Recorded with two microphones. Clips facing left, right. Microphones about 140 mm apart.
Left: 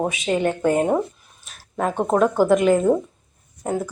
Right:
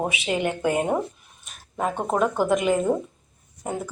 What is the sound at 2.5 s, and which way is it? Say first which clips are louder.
Speech: left 5 dB; 45° left (ahead or behind).